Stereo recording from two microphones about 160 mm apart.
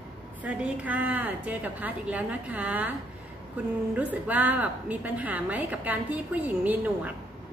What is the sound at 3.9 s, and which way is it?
A man's voice, 10° right (ahead or behind).